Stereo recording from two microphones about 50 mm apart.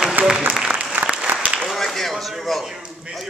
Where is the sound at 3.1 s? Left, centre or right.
Right.